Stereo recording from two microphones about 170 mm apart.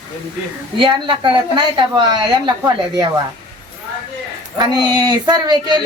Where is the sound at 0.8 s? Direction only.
30° right (ahead or behind).